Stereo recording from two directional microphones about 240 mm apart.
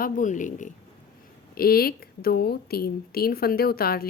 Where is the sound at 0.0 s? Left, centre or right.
Left.